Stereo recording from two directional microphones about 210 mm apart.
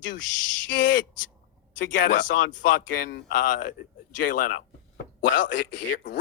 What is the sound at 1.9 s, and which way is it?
Speech, 40° left (ahead or behind).